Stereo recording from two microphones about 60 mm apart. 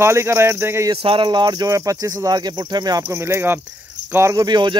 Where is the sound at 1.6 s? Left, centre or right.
Right.